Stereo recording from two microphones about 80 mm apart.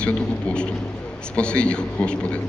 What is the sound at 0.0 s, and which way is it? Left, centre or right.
A man's voice, centre.